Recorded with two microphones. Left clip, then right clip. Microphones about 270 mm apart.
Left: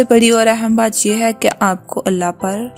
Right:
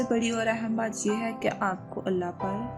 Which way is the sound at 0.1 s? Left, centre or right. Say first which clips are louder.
Left 17 dB; left.